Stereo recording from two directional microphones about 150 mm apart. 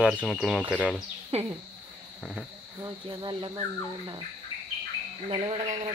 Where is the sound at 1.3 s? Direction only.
45° right (ahead or behind).